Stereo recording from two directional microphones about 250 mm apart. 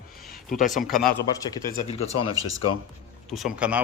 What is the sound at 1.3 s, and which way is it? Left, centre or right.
Speech, centre.